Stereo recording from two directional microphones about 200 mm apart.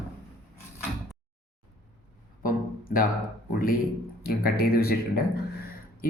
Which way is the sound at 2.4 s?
45° left (ahead or behind).